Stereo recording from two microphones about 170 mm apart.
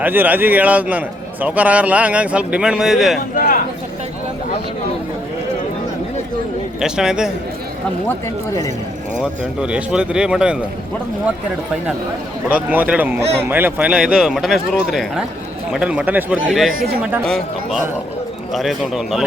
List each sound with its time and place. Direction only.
0.0 s a man's voice: 10° right (ahead or behind)
3.3 s speech: 55° left (ahead or behind)
6.7 s speech: 5° right (ahead or behind)
9.1 s speech: 5° right (ahead or behind)
12.5 s a man's voice: 10° right (ahead or behind)